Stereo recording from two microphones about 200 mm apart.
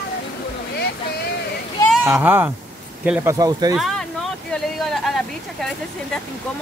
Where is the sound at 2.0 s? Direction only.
10° right (ahead or behind).